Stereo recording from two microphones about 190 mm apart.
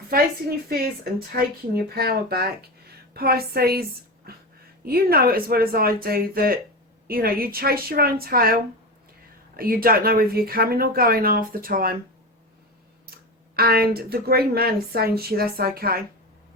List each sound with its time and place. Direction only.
1.4 s speech: 55° right (ahead or behind)
4.3 s a sound: 55° right (ahead or behind)
4.9 s speech: 55° right (ahead or behind)
13.6 s speech: 55° right (ahead or behind)